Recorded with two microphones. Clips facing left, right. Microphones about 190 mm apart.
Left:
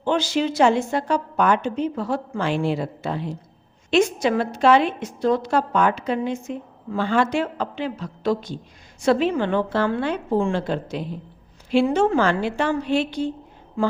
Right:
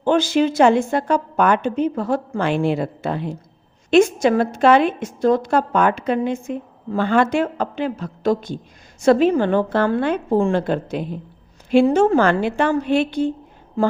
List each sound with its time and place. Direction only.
0.0 s a woman's voice: 50° right (ahead or behind)
13.8 s speech: 40° right (ahead or behind)